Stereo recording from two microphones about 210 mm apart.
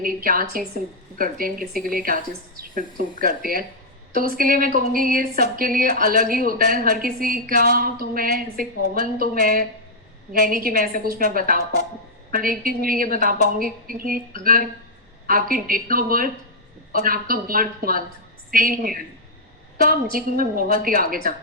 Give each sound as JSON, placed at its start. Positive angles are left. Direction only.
{"t": 0.0, "sound": "a woman's voice", "side_deg": -40}